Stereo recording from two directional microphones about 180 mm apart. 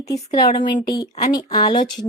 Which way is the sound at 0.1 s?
25° left (ahead or behind).